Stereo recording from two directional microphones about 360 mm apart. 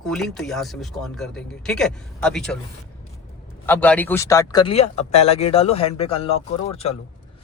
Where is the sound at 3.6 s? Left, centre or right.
Centre.